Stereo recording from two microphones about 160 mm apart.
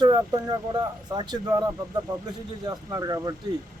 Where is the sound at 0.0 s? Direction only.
25° right (ahead or behind).